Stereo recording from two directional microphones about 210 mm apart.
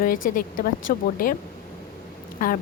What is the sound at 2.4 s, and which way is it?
Speech, 40° left (ahead or behind).